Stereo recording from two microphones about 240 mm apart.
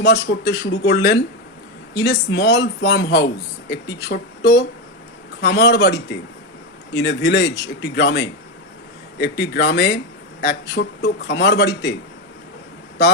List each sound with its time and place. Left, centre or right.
0.0 s speech: left